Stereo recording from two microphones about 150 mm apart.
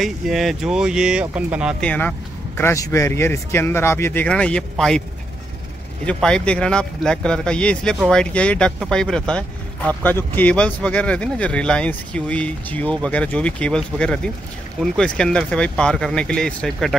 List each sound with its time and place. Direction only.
0.0 s speech: centre (ahead or behind)
1.8 s speech: 10° left (ahead or behind)
6.0 s speech: 5° left (ahead or behind)